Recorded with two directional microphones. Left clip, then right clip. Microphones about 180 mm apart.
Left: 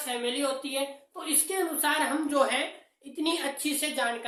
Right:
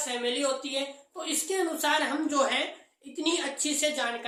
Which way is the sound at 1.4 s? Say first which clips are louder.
Right 1 dB; 5° left (ahead or behind).